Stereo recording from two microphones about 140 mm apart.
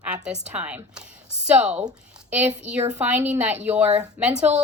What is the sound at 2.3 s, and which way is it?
A woman's voice, 10° right (ahead or behind).